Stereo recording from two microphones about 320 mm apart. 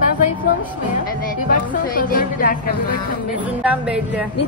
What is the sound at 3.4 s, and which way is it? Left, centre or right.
Speech, centre.